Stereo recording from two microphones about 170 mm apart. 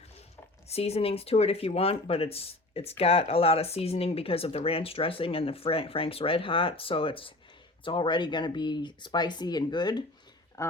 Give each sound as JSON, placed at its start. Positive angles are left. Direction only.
{"t": 0.7, "sound": "speech", "side_deg": 35}